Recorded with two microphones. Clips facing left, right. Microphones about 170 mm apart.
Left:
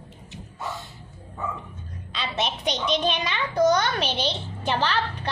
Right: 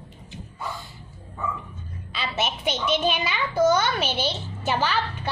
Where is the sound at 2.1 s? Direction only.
5° right (ahead or behind).